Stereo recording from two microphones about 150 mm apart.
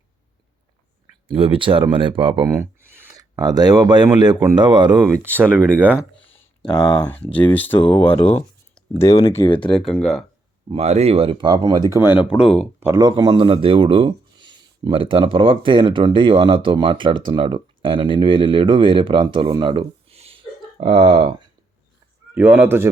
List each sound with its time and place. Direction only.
1.3 s speech: 35° right (ahead or behind)
2.5 s speech: 15° right (ahead or behind)
6.1 s a sound: 5° left (ahead or behind)
7.5 s speech: 10° left (ahead or behind)
8.1 s speech: 40° left (ahead or behind)
9.0 s speech: 25° left (ahead or behind)
9.7 s speech: centre (ahead or behind)
10.7 s speech: 45° right (ahead or behind); by 11.9 s 25° right (ahead or behind)
11.9 s speech: 15° right (ahead or behind)
12.8 s speech: 25° right (ahead or behind)
22.4 s speech: 10° right (ahead or behind)